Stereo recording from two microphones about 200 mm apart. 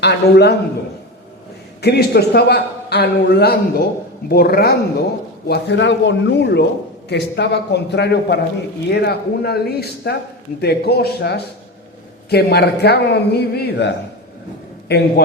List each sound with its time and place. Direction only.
0.0 s a man's voice: 55° left (ahead or behind)
1.8 s a man's voice: 55° left (ahead or behind)
5.5 s a man's voice: 60° left (ahead or behind)